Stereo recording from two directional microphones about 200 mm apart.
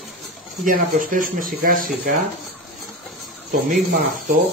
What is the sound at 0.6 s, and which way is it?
Speech, 45° right (ahead or behind).